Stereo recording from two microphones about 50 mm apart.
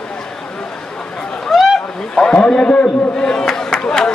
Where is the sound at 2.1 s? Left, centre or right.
Centre.